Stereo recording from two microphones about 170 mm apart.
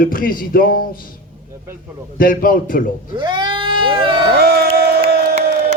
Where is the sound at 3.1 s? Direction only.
30° right (ahead or behind).